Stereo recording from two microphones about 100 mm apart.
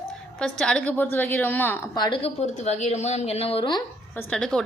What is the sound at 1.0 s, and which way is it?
Speech, 20° left (ahead or behind).